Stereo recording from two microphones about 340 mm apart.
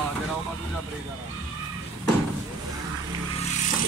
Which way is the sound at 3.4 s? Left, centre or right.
Left.